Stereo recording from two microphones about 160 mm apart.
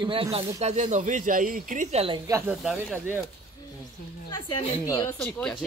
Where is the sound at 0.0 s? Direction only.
35° right (ahead or behind).